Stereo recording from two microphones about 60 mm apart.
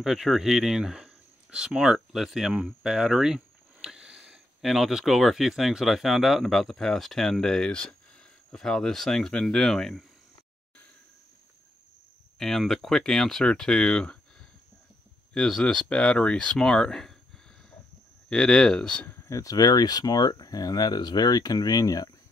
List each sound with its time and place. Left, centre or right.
0.0 s speech: centre
4.6 s speech: centre
12.4 s speech: centre
15.3 s speech: centre
18.3 s speech: centre
19.2 s speech: left